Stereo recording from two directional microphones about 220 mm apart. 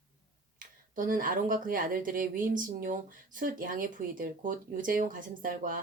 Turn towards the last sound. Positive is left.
turn(degrees=-40)  # may be behind; listen again after turning